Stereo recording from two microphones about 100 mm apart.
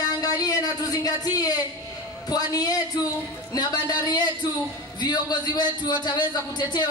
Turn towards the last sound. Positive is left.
turn(degrees=45)  # may be behind; listen again after turning